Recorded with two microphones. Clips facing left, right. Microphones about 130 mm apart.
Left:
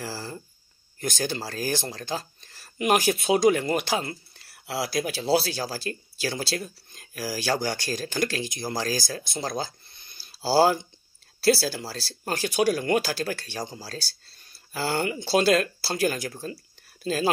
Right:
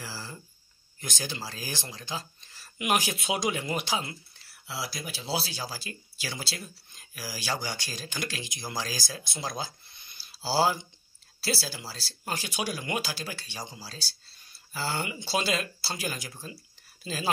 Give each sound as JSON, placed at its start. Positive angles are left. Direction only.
{"t": 0.0, "sound": "speech", "side_deg": 50}